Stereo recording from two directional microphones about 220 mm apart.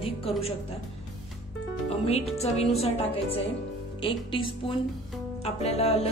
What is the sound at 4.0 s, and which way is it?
Speech, 25° left (ahead or behind).